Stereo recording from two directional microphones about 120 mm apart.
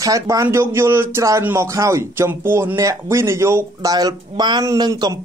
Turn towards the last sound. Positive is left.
turn(degrees=-35)  # may be behind; listen again after turning